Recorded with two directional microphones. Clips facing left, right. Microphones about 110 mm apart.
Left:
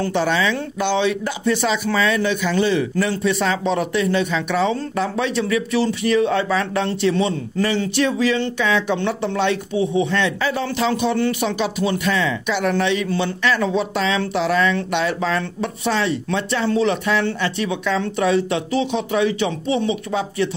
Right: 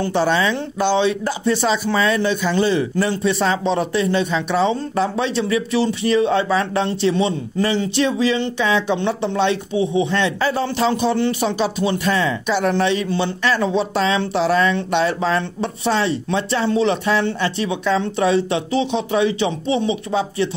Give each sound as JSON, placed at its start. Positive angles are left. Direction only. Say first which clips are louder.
{"t": 0.1, "sound": "speech", "louder": "right 2 dB", "side_deg": -35}